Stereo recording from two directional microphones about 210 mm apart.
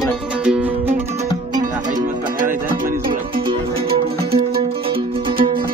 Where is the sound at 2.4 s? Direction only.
40° right (ahead or behind).